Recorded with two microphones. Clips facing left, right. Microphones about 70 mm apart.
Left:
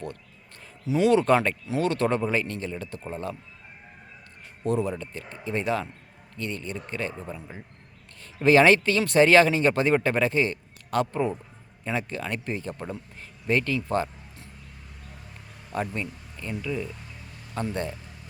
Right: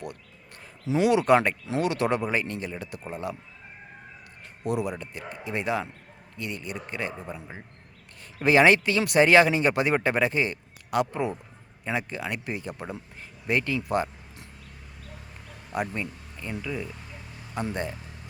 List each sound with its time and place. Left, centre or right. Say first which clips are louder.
0.9 s speech: even; centre
4.7 s speech: left 2 dB; centre
15.7 s speech: even; centre